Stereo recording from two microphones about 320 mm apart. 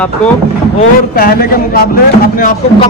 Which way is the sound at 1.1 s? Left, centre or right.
Left.